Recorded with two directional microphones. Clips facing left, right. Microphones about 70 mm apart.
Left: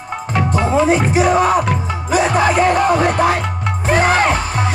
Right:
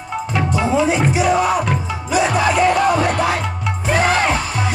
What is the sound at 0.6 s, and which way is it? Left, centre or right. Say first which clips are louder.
Music: left 3 dB; left.